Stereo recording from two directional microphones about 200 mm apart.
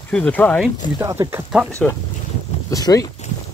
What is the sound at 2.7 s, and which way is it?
Speech, 15° left (ahead or behind).